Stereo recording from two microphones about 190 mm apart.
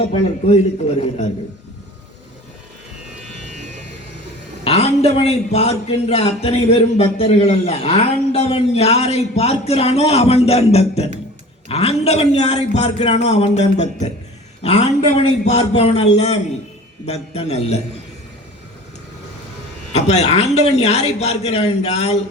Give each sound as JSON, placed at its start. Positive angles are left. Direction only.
{"t": 4.6, "sound": "speech", "side_deg": 30}
{"t": 19.9, "sound": "speech", "side_deg": 35}